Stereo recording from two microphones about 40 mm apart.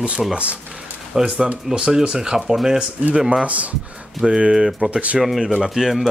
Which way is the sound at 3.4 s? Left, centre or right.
Right.